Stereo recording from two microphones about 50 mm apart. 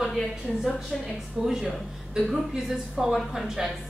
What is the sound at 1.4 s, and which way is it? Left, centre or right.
Speech, centre.